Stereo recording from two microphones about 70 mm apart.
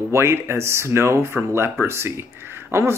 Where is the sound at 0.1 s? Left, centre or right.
Right.